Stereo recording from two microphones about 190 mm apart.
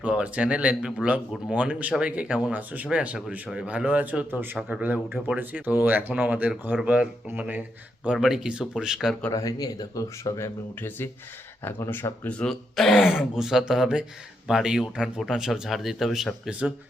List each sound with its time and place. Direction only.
0.0 s a man's voice: 5° right (ahead or behind)
9.3 s speech: 20° left (ahead or behind); by 16.7 s 5° right (ahead or behind)